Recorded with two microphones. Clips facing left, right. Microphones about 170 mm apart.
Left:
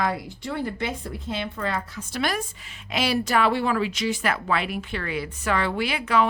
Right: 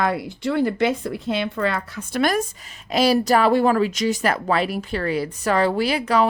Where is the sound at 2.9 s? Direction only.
40° right (ahead or behind).